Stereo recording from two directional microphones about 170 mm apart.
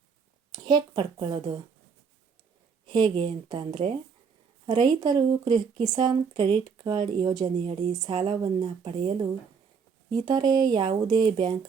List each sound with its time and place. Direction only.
0.5 s speech: 25° right (ahead or behind)
2.8 s speech: 25° right (ahead or behind)
7.6 s a woman's voice: 35° right (ahead or behind)
10.2 s speech: 25° right (ahead or behind)